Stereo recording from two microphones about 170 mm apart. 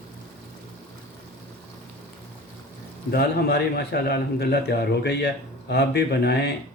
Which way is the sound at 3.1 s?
70° left (ahead or behind).